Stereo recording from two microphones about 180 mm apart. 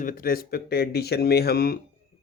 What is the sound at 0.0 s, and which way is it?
Speech, 50° left (ahead or behind).